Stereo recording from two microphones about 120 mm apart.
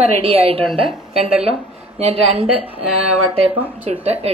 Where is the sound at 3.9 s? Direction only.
60° right (ahead or behind).